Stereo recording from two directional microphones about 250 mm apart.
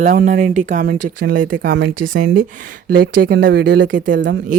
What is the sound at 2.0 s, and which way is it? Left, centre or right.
Speech, right.